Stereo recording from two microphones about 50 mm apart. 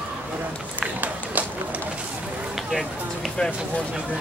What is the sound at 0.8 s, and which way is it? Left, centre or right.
Run, right.